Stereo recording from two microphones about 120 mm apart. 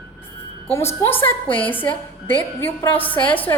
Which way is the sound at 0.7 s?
20° left (ahead or behind).